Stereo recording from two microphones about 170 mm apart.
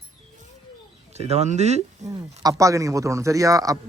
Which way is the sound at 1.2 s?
40° right (ahead or behind).